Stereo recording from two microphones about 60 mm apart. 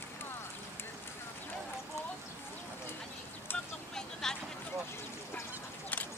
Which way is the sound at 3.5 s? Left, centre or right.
Left.